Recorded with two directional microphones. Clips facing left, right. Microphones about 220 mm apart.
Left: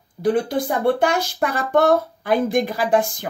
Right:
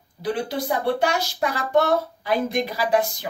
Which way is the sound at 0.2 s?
50° left (ahead or behind).